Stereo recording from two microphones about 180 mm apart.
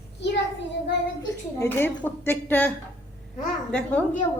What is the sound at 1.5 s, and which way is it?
A woman's voice, 15° left (ahead or behind).